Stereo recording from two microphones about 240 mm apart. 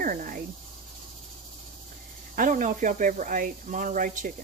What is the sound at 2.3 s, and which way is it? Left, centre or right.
Speech, right.